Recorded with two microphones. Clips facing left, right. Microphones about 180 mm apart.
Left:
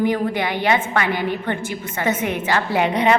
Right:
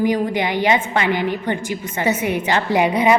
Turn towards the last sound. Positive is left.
turn(degrees=-10)  # may be behind; listen again after turning